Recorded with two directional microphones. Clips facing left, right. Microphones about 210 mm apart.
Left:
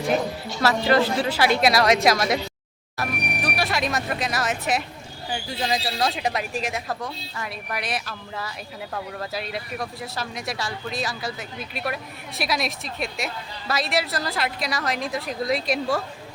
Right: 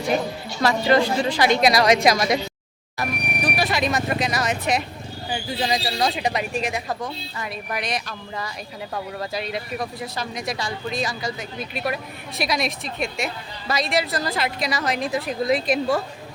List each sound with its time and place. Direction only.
0.6 s speech: 5° left (ahead or behind)